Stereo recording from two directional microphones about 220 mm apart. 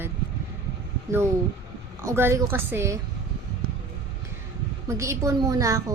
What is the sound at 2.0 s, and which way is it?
Speech, 10° right (ahead or behind).